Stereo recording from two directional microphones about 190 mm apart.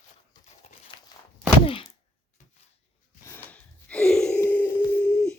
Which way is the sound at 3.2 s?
10° left (ahead or behind).